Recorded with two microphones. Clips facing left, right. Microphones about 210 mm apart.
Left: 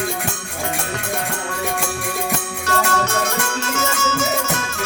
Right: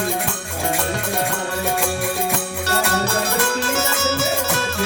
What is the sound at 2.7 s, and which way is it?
Music, 35° right (ahead or behind).